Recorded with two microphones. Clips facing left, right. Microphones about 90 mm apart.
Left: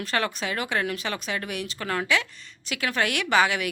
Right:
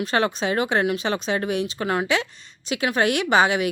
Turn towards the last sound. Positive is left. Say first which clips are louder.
# right 4 dB
turn(degrees=-20)  # may be behind; listen again after turning